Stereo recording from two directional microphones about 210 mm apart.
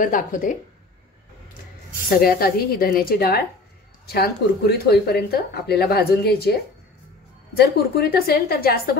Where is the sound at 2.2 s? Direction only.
45° left (ahead or behind).